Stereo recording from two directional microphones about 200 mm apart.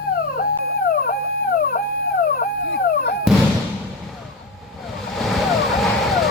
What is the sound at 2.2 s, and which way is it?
Dog, 50° left (ahead or behind).